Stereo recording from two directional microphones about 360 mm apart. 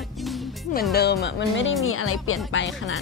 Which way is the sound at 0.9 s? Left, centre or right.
Left.